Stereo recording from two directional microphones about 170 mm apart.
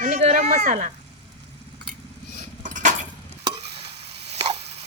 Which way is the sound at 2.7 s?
45° right (ahead or behind).